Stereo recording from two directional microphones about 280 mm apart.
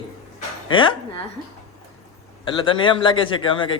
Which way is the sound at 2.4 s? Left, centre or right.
Centre.